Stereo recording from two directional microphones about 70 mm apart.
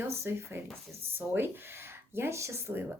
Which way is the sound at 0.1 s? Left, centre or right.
Right.